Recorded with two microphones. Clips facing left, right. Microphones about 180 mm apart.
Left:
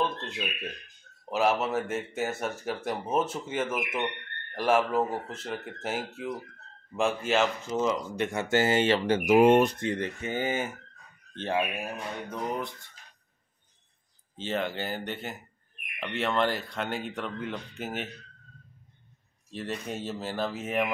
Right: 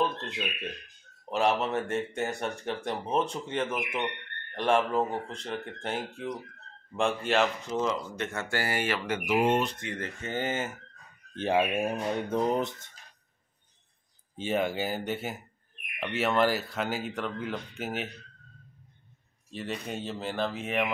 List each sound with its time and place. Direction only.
0.0 s a sound: centre (ahead or behind)
1.3 s speech: 5° left (ahead or behind); by 9.3 s 30° left (ahead or behind)
9.9 s speech: 15° left (ahead or behind)
11.5 s speech: 25° right (ahead or behind)
14.3 s speech: 10° right (ahead or behind)
19.5 s speech: centre (ahead or behind)